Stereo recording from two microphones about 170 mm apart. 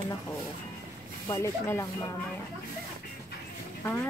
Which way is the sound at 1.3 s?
15° left (ahead or behind).